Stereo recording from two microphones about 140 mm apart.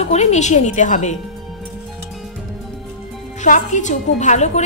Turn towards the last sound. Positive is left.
turn(degrees=55)  # may be behind; listen again after turning